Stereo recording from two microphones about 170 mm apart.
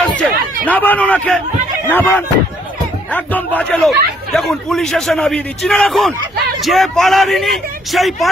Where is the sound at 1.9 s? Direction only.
10° left (ahead or behind).